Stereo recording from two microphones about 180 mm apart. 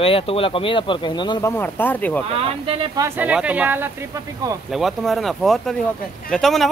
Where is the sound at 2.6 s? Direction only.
30° right (ahead or behind).